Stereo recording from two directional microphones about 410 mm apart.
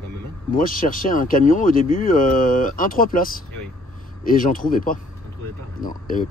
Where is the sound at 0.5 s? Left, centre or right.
Centre.